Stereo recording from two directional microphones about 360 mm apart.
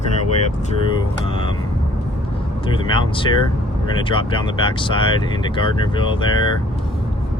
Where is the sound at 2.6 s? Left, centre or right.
Centre.